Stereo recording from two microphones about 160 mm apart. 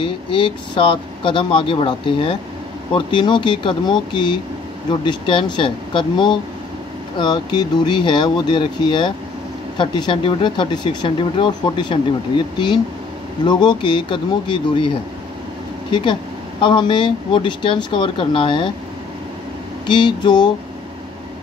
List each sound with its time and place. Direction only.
0.0 s speech: 30° left (ahead or behind)
15.9 s speech: 30° left (ahead or behind)
19.9 s speech: 30° left (ahead or behind)